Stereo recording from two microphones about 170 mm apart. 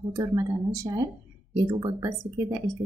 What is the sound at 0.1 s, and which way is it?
Speech, 25° right (ahead or behind).